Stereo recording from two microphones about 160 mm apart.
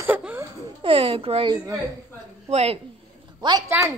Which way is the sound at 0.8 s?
35° right (ahead or behind).